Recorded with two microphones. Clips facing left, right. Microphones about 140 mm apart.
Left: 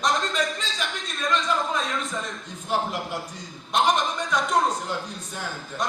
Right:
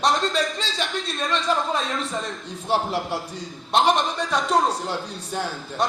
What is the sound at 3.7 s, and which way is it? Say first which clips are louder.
Speech: right 2 dB; 30° right (ahead or behind).